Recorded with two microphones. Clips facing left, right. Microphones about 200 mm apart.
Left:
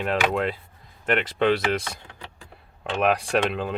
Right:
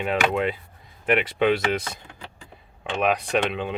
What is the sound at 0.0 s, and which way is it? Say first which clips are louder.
Speech: right 1 dB; centre (ahead or behind).